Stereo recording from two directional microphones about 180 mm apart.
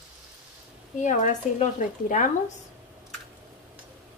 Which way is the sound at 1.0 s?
40° left (ahead or behind).